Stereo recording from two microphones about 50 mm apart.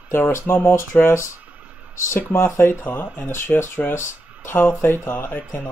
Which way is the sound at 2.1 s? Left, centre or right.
Left.